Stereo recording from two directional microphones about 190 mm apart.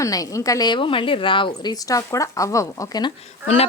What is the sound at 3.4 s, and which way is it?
Speech, 30° left (ahead or behind).